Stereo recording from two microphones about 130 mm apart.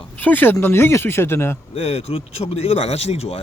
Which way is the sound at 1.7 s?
50° left (ahead or behind).